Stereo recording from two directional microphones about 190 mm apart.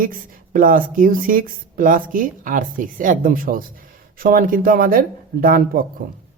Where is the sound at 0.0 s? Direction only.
45° right (ahead or behind).